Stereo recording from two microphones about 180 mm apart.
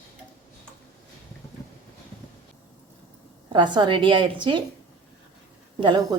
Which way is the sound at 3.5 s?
25° right (ahead or behind).